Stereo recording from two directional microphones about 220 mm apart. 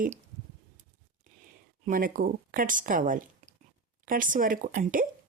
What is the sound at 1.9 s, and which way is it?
Speech, 40° right (ahead or behind).